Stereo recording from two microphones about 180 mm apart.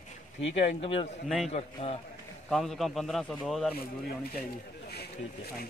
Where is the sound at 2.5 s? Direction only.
Centre (ahead or behind).